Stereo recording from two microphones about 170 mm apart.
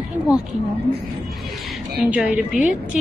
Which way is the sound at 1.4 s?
Centre (ahead or behind).